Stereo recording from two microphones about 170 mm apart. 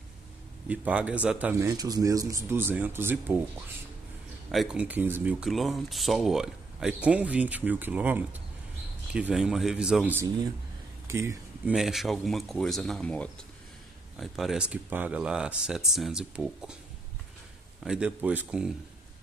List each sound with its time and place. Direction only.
0.7 s speech: 10° right (ahead or behind)
1.6 s speech: 20° right (ahead or behind)
4.5 s speech: 5° right (ahead or behind)
11.1 s a sound: 15° right (ahead or behind)
11.7 s speech: centre (ahead or behind)
17.8 s speech: 5° right (ahead or behind)